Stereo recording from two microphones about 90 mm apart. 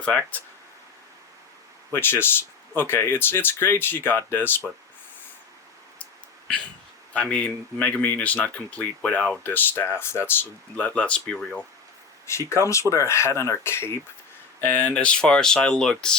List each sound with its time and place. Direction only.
0.0 s speech: 10° left (ahead or behind)
1.9 s speech: 25° left (ahead or behind)
7.1 s speech: 15° left (ahead or behind)
10.8 s speech: 15° left (ahead or behind)
12.2 s speech: 30° left (ahead or behind); by 16.1 s 10° left (ahead or behind)